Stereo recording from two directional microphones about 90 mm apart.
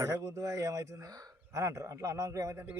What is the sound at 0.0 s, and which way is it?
A man's voice, 35° right (ahead or behind).